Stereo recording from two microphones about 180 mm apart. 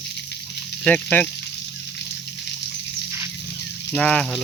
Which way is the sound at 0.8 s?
5° left (ahead or behind).